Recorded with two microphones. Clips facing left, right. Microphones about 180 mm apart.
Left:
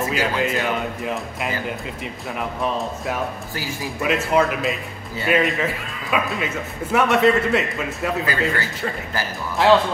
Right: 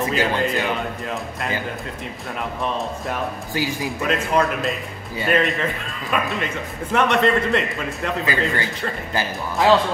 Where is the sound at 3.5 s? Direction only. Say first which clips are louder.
Right 5 dB; 15° right (ahead or behind).